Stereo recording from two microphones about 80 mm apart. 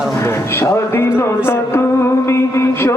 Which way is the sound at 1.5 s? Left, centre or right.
Left.